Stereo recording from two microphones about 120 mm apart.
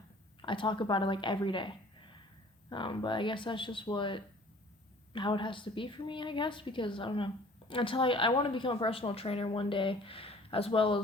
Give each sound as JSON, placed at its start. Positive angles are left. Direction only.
{"t": 0.4, "sound": "a woman's voice", "side_deg": 45}